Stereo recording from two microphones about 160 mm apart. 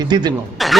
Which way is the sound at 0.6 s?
Centre (ahead or behind).